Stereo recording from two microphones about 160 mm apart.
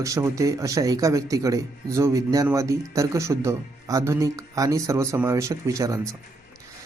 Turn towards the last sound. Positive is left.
turn(degrees=-20)  # may be behind; listen again after turning